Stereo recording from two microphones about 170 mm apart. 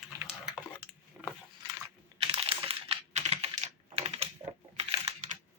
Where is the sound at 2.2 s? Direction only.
35° right (ahead or behind).